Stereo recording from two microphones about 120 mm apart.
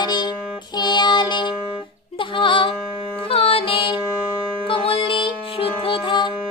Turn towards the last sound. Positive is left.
turn(degrees=40)  # may be behind; listen again after turning